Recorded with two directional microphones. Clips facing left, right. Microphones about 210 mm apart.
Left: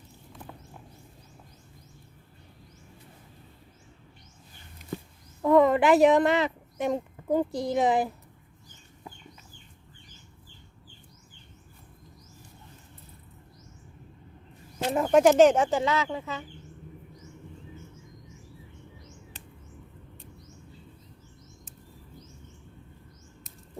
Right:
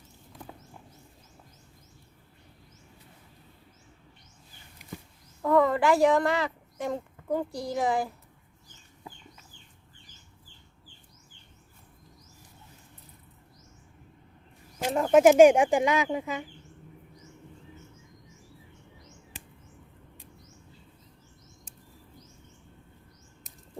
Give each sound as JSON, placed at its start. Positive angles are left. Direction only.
{"t": 5.4, "sound": "speech", "side_deg": 20}
{"t": 14.9, "sound": "speech", "side_deg": 0}